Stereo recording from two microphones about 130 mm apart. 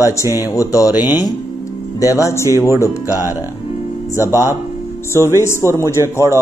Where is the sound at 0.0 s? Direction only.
20° left (ahead or behind).